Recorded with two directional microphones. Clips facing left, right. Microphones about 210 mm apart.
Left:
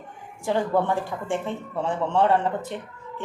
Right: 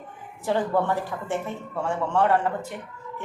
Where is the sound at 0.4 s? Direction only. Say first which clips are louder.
Left 1 dB; 15° left (ahead or behind).